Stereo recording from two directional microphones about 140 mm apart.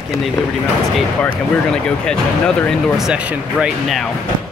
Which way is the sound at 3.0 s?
5° right (ahead or behind).